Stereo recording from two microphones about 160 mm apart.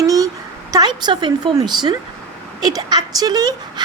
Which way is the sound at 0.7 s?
25° right (ahead or behind).